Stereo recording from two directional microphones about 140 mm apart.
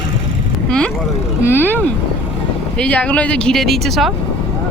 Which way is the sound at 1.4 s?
15° left (ahead or behind).